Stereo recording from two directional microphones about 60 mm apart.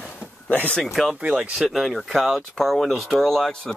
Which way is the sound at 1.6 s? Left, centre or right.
Centre.